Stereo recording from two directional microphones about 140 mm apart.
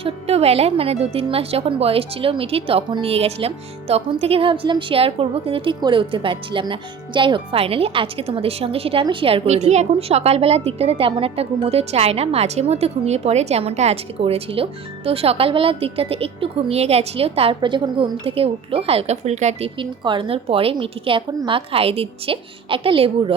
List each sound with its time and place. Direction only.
0.0 s a woman's voice: 50° right (ahead or behind)
19.8 s a woman's voice: 35° right (ahead or behind)